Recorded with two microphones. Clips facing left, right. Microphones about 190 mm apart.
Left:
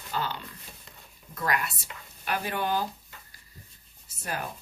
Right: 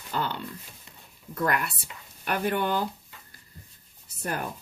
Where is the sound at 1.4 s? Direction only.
55° right (ahead or behind).